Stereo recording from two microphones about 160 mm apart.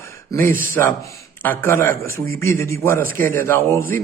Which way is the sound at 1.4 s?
15° left (ahead or behind).